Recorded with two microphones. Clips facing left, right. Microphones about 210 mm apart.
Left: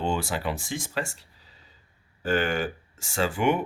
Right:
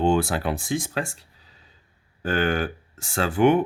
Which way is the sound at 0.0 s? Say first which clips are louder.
Right 6 dB; 55° right (ahead or behind).